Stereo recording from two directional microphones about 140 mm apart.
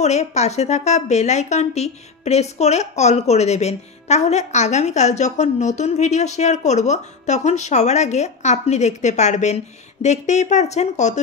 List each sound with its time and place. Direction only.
0.0 s a woman's voice: 55° left (ahead or behind)